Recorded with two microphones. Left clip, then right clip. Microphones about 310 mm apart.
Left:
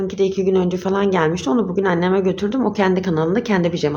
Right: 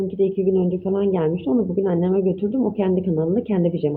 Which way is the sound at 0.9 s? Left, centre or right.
Centre.